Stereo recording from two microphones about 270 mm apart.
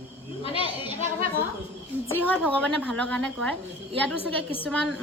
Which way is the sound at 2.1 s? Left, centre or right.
Centre.